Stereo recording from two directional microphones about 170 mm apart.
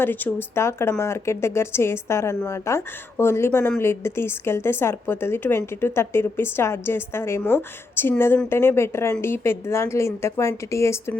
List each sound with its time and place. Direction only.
0.0 s speech: 10° left (ahead or behind)